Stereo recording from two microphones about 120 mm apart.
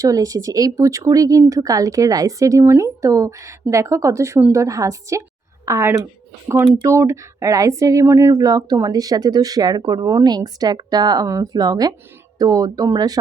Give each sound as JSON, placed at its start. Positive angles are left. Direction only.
{"t": 0.0, "sound": "speech", "side_deg": -30}